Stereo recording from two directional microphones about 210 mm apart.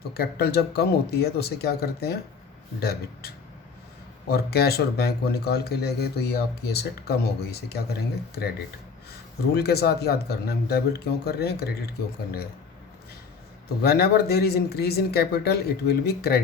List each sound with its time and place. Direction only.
0.1 s speech: 50° left (ahead or behind)
9.6 s speech: 50° left (ahead or behind)
13.8 s speech: 45° left (ahead or behind)